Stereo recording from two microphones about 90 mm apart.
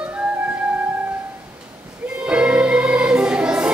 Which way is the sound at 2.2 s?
10° right (ahead or behind).